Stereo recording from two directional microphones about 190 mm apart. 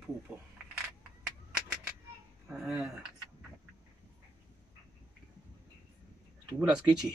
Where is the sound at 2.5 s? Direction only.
Centre (ahead or behind).